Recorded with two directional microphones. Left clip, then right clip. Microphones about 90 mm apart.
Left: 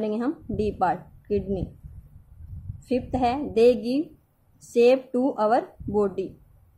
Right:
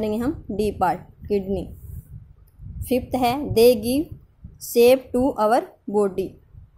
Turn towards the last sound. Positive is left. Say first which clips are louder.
# right 3 dB
turn(degrees=-30)  # may be behind; listen again after turning